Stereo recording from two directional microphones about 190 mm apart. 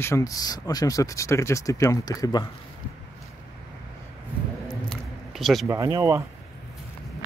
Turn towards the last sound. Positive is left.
turn(degrees=-15)  # may be behind; listen again after turning